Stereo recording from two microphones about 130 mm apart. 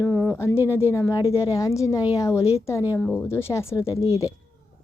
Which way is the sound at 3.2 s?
20° left (ahead or behind).